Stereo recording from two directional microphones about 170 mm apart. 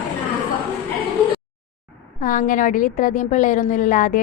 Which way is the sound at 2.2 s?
50° left (ahead or behind).